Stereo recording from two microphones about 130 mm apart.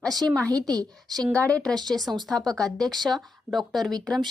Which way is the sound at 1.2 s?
10° left (ahead or behind).